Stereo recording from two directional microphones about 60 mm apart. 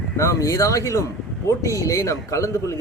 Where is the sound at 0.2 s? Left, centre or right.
Left.